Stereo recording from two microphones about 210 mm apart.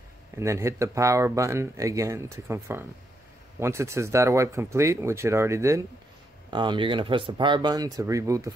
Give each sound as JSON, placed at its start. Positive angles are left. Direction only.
{"t": 0.4, "sound": "speech", "side_deg": -15}